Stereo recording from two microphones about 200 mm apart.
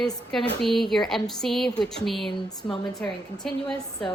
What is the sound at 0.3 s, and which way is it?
A woman's voice, centre (ahead or behind).